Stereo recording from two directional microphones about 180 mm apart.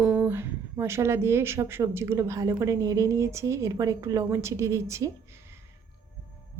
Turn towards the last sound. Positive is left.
turn(degrees=-15)  # may be behind; listen again after turning